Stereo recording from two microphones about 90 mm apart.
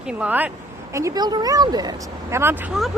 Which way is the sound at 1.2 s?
50° right (ahead or behind).